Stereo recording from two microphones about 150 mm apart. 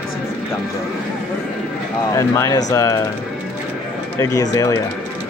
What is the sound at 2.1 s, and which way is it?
Speech, 20° left (ahead or behind).